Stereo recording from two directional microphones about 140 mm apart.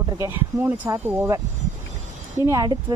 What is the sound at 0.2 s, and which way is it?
A woman's voice, 15° right (ahead or behind).